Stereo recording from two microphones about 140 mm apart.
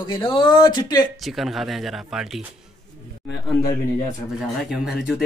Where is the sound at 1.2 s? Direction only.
Centre (ahead or behind).